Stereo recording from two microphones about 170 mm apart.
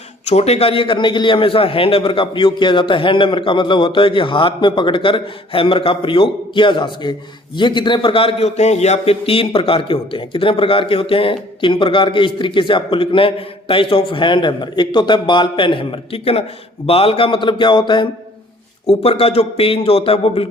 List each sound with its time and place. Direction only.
0.3 s a man's voice: 40° left (ahead or behind)